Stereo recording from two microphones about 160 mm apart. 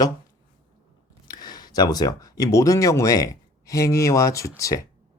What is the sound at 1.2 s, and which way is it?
Speech, 25° left (ahead or behind).